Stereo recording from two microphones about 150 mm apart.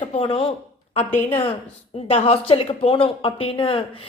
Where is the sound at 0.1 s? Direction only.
40° left (ahead or behind).